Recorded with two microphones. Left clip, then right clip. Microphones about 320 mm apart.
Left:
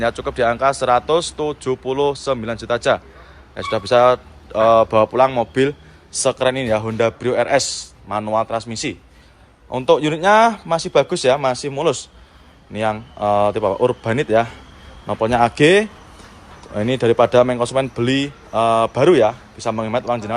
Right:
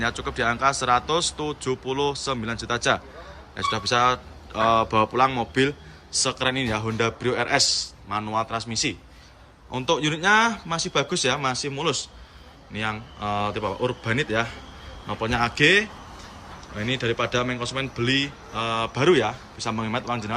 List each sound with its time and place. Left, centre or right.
0.0 s a man's voice: centre